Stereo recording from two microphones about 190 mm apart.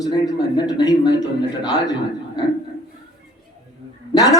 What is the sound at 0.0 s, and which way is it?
A man's voice, 20° left (ahead or behind).